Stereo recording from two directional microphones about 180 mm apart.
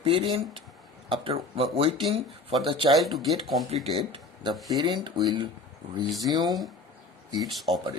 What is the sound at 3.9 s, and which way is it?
Speech, 30° right (ahead or behind).